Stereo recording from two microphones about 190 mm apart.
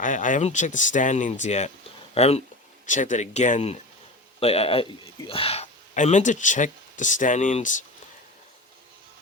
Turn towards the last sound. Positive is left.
turn(degrees=40)  # may be behind; listen again after turning